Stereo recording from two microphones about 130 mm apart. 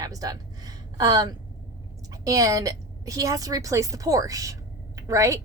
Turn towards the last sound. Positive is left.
turn(degrees=-25)  # may be behind; listen again after turning